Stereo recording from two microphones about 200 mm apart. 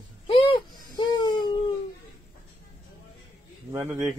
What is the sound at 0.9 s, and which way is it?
Baby cry, 20° left (ahead or behind).